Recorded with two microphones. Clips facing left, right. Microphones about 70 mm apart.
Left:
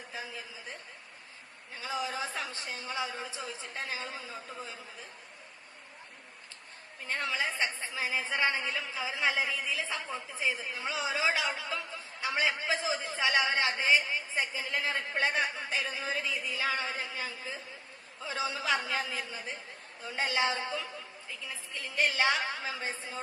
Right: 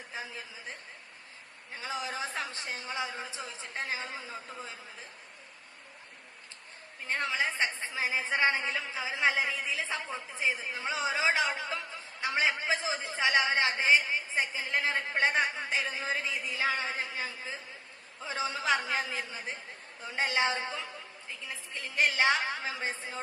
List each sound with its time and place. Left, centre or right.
1.7 s a woman's voice: right
7.1 s a woman's voice: right